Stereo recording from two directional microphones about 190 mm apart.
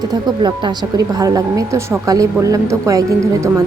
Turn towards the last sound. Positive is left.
turn(degrees=-15)  # may be behind; listen again after turning